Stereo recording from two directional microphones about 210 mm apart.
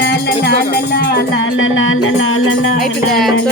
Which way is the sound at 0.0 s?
50° left (ahead or behind).